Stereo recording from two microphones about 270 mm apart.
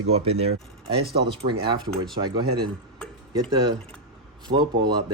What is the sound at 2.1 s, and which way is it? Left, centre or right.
Speech, centre.